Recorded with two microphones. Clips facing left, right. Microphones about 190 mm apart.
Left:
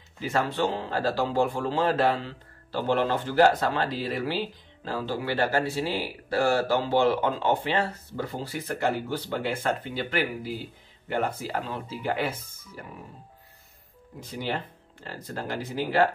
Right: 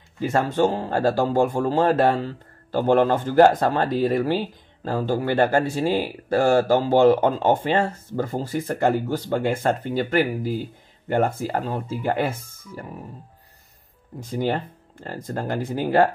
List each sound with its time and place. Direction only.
0.2 s speech: 50° right (ahead or behind)
14.3 s speech: 45° right (ahead or behind)